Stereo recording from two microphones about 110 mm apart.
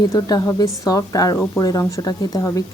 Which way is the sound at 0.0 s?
35° left (ahead or behind).